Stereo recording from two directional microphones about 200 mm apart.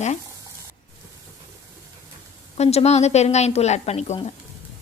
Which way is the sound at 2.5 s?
30° left (ahead or behind).